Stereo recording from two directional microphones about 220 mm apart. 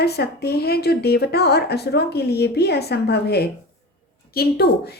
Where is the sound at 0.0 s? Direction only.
45° left (ahead or behind).